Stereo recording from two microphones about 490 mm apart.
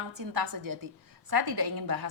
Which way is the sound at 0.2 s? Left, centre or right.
Right.